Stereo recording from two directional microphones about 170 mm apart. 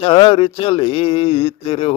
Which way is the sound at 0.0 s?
30° left (ahead or behind).